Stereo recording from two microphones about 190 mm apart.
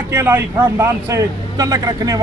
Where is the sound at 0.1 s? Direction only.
10° right (ahead or behind).